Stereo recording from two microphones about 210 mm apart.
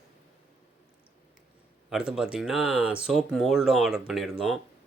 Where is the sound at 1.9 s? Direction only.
5° right (ahead or behind).